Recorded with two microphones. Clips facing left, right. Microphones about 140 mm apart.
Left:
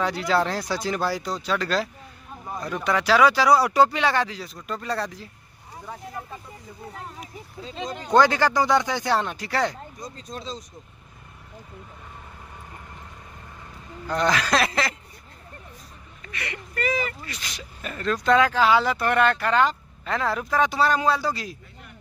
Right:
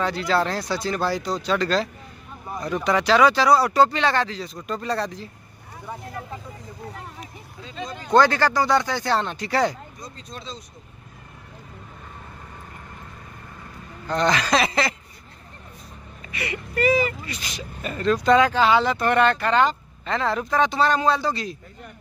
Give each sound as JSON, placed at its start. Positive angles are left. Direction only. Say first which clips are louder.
{"t": 0.0, "sound": "speech", "louder": "right 1 dB", "side_deg": 15}
{"t": 7.8, "sound": "speech", "louder": "right 1 dB", "side_deg": 15}
{"t": 10.0, "sound": "speech", "louder": "left 3 dB", "side_deg": 40}
{"t": 14.0, "sound": "speech", "louder": "right 1 dB", "side_deg": 5}
{"t": 16.3, "sound": "speech", "louder": "right 4 dB", "side_deg": -5}